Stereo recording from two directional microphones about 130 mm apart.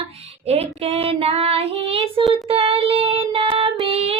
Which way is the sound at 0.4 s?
50° right (ahead or behind).